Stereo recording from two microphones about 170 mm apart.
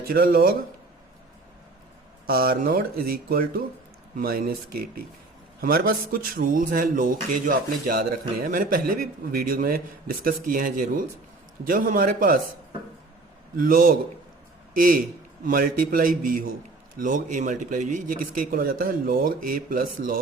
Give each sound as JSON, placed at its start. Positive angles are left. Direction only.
{"t": 0.1, "sound": "a man's voice", "side_deg": -60}
{"t": 2.2, "sound": "a man's voice", "side_deg": -60}
{"t": 5.5, "sound": "a man's voice", "side_deg": -60}
{"t": 13.6, "sound": "a man's voice", "side_deg": -55}
{"t": 15.4, "sound": "a man's voice", "side_deg": -55}